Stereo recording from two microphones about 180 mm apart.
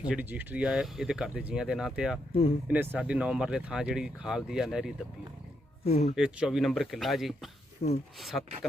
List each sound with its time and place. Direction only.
0.1 s speech: 10° right (ahead or behind)
5.8 s speech: 35° left (ahead or behind)
6.1 s speech: 5° right (ahead or behind)
7.8 s speech: 40° left (ahead or behind)
8.2 s speech: centre (ahead or behind)